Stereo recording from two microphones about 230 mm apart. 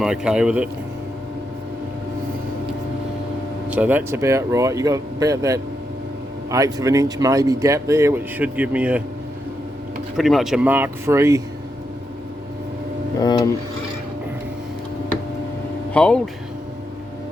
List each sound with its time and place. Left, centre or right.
0.0 s speech: centre
3.7 s speech: centre
10.2 s speech: centre
13.1 s a sound: centre
15.9 s speech: centre